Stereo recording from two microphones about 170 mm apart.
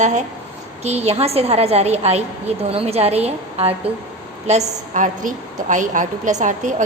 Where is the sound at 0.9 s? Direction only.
40° right (ahead or behind).